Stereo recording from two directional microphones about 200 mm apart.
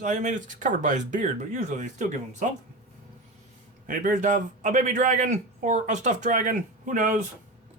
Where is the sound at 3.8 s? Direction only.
40° right (ahead or behind).